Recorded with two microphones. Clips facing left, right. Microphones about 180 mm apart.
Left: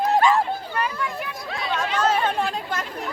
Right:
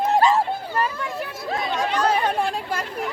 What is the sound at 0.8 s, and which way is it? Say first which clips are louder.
Chatter: right 3 dB; 35° right (ahead or behind).